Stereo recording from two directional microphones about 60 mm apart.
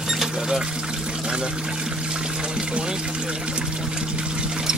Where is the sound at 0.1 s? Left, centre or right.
Centre.